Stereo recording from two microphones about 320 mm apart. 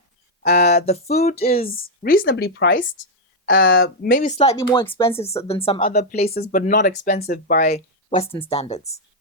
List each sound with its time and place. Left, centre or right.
0.4 s speech: left